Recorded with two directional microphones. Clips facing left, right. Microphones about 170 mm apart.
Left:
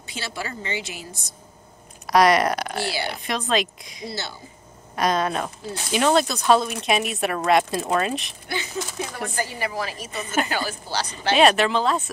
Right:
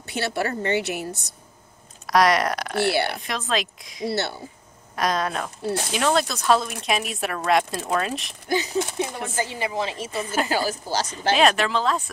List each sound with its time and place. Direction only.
0.1 s a woman's voice: 60° right (ahead or behind)
2.0 s a woman's voice: centre (ahead or behind)
2.8 s a woman's voice: 60° right (ahead or behind)
3.2 s a woman's voice: centre (ahead or behind)
4.1 s a woman's voice: 65° right (ahead or behind)
4.9 s a woman's voice: centre (ahead or behind)
8.5 s speech: 40° right (ahead or behind)
8.9 s a woman's voice: 20° right (ahead or behind)
10.5 s speech: 40° right (ahead or behind)
11.3 s a woman's voice: centre (ahead or behind)